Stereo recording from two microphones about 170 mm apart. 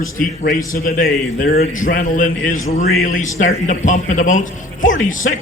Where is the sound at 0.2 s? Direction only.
55° left (ahead or behind).